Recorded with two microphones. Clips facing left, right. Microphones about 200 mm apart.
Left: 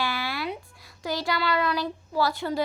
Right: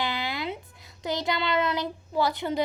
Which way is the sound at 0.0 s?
20° right (ahead or behind).